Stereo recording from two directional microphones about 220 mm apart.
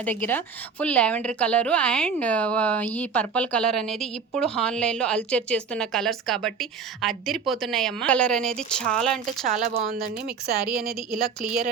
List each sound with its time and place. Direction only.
0.0 s a woman's voice: 10° left (ahead or behind)
9.4 s speech: 40° right (ahead or behind)
10.7 s a woman's voice: centre (ahead or behind)